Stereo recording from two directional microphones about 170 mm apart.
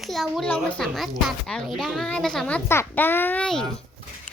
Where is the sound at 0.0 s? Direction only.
Centre (ahead or behind).